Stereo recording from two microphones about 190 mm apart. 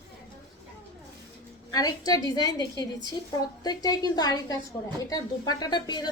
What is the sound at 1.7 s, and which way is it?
A woman's voice, 20° left (ahead or behind).